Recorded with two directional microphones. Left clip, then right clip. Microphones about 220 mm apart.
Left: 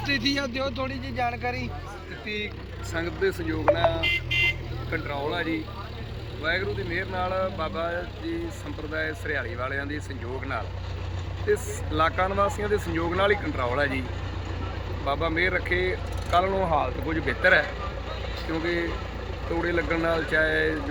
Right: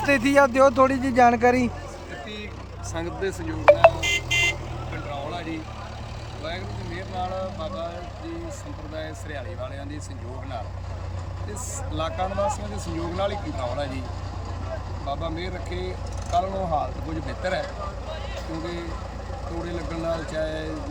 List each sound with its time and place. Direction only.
0.1 s speech: 20° right (ahead or behind)
2.9 s speech: 10° right (ahead or behind)
4.0 s vehicle: 30° right (ahead or behind)
5.3 s speech: 5° right (ahead or behind)
9.0 s speech: centre (ahead or behind)
11.5 s speech: centre (ahead or behind)
15.0 s speech: centre (ahead or behind)